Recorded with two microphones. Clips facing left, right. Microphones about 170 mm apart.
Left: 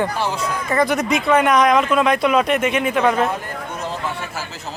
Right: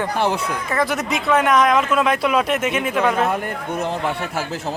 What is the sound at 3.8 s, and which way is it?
Speech, 60° right (ahead or behind).